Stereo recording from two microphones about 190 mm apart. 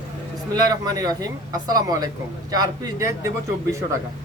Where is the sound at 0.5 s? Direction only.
20° right (ahead or behind).